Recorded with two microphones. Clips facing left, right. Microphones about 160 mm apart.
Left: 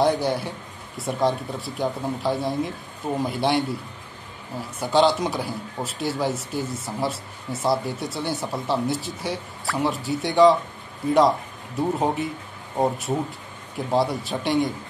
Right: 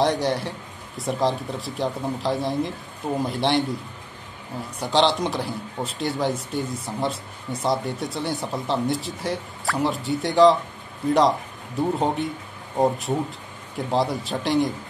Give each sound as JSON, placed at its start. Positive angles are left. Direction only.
{"t": 0.0, "sound": "speech", "side_deg": 0}